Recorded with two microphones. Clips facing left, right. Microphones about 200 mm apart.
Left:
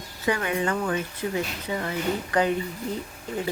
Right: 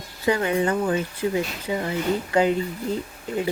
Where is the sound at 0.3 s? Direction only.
25° right (ahead or behind).